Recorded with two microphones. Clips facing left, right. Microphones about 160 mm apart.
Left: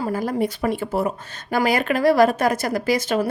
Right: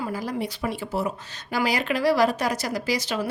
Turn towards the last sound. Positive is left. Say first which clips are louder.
# left 6 dB
turn(degrees=50)  # may be behind; listen again after turning